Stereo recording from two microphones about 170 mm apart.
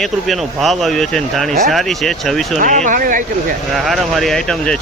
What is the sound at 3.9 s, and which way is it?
Speech, centre (ahead or behind).